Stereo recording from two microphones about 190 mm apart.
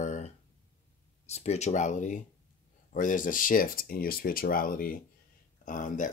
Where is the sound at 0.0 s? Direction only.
40° left (ahead or behind).